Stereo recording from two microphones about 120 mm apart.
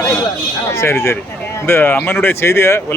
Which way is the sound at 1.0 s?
20° left (ahead or behind).